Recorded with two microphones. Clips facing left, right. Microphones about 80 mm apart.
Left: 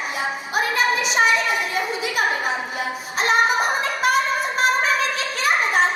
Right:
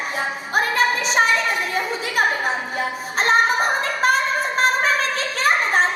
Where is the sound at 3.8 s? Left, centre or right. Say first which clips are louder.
Right 1 dB; right.